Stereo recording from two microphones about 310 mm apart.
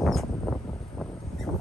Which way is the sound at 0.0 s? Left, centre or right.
Centre.